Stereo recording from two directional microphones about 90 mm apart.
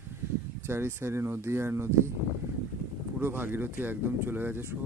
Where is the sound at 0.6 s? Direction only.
25° right (ahead or behind).